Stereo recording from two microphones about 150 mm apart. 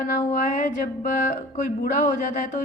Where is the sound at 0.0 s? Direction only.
55° left (ahead or behind).